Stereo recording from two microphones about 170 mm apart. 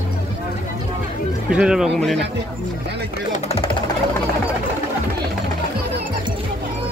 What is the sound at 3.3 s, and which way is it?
Music, 40° left (ahead or behind).